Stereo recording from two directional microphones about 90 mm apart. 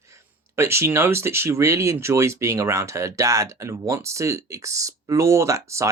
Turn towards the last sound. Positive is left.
turn(degrees=-35)  # may be behind; listen again after turning